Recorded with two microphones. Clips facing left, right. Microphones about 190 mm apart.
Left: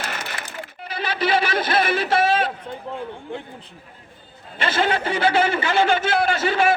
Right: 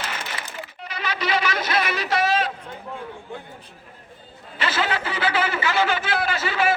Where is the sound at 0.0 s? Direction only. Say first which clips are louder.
Left 1 dB; 50° left (ahead or behind).